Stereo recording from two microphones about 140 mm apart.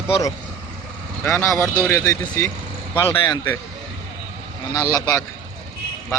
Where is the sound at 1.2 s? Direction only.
5° left (ahead or behind).